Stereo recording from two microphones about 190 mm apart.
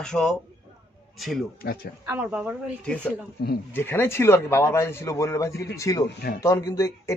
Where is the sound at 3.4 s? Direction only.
60° left (ahead or behind).